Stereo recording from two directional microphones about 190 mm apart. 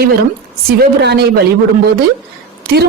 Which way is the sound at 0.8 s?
60° right (ahead or behind).